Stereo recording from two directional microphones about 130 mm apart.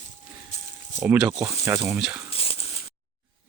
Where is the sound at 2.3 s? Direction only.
50° left (ahead or behind).